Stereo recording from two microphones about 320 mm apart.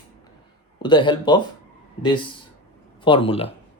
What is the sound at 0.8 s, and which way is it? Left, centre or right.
Speech, centre.